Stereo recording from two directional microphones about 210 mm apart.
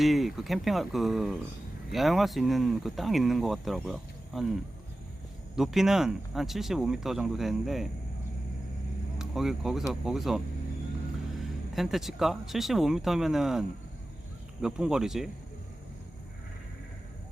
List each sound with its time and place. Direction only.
0.0 s speech: centre (ahead or behind)
5.5 s speech: centre (ahead or behind)
9.1 s speech: centre (ahead or behind)
11.7 s speech: centre (ahead or behind)